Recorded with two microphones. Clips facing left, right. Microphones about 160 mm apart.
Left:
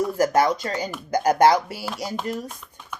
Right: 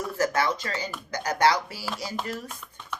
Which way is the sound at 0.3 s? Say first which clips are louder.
Left 6 dB; 40° left (ahead or behind).